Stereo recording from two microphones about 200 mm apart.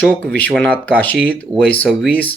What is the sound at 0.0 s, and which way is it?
Speech, 5° left (ahead or behind).